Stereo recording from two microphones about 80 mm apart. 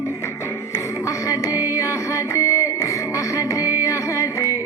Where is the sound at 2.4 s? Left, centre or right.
Left.